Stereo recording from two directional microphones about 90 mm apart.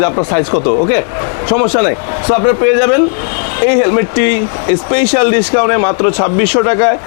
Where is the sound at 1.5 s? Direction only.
25° left (ahead or behind).